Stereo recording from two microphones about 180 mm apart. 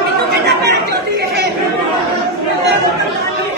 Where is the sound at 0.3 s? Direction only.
65° right (ahead or behind).